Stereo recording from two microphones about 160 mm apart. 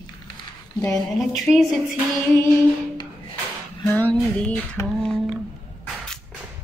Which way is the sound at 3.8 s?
10° left (ahead or behind).